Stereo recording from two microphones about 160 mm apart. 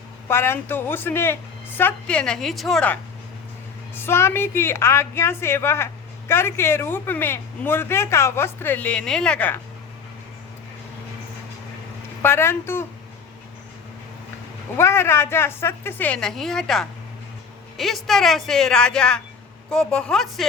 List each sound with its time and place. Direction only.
0.3 s a woman's voice: 15° left (ahead or behind)
12.2 s a woman's voice: 15° left (ahead or behind)
14.8 s a woman's voice: 15° left (ahead or behind)